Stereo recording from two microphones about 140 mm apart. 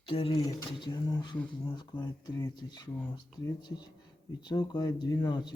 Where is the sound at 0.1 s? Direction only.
40° left (ahead or behind).